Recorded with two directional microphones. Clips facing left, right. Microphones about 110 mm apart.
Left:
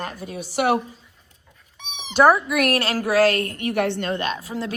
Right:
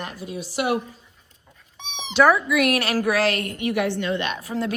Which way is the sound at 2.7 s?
25° left (ahead or behind).